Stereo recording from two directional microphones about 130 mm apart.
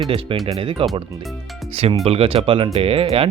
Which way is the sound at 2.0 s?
50° right (ahead or behind).